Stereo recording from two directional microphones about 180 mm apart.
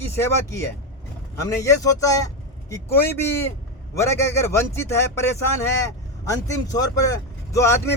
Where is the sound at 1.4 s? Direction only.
20° left (ahead or behind).